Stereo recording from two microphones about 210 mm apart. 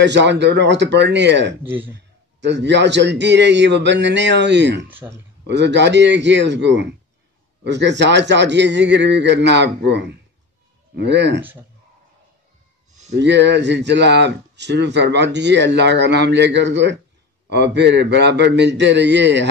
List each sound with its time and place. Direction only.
0.0 s speech: 55° right (ahead or behind)
1.6 s a man's voice: 10° right (ahead or behind)
2.4 s speech: 55° right (ahead or behind)
4.8 s a man's voice: 10° right (ahead or behind)
5.5 s speech: 55° right (ahead or behind)
13.2 s speech: 55° right (ahead or behind)